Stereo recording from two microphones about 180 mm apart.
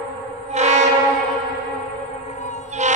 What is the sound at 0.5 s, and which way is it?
Train, 40° right (ahead or behind).